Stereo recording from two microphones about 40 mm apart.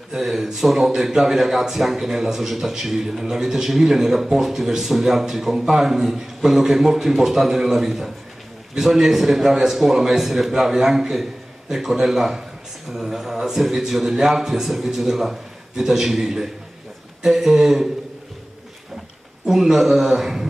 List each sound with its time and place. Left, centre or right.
0.1 s a man's voice: centre
19.4 s a man's voice: centre